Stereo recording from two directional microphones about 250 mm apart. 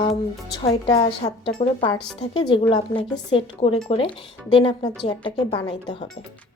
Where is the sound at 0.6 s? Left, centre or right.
Left.